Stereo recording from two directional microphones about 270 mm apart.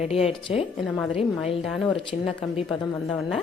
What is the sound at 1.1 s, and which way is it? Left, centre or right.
Speech, left.